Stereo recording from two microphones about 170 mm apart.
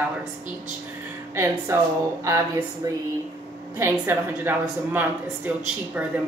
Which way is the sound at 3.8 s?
10° right (ahead or behind).